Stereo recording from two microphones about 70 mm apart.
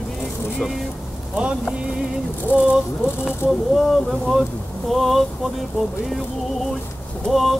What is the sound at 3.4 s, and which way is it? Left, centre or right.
Speech, left.